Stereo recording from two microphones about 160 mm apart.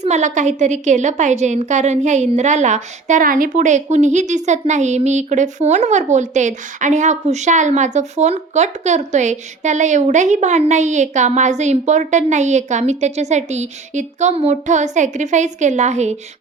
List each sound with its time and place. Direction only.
0.0 s a woman's voice: 45° right (ahead or behind)